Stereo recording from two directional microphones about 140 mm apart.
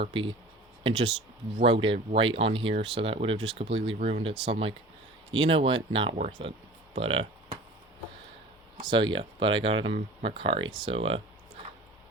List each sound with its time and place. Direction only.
0.0 s speech: 40° right (ahead or behind)
8.8 s speech: 35° right (ahead or behind)